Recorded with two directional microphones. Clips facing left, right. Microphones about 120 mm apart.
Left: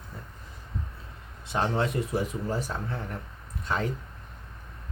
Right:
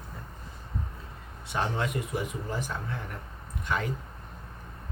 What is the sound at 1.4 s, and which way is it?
Speech, 30° left (ahead or behind).